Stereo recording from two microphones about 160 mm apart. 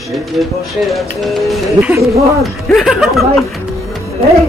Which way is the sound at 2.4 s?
Centre (ahead or behind).